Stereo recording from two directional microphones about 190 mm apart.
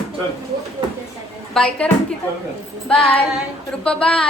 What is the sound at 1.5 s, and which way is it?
Speech, 5° left (ahead or behind).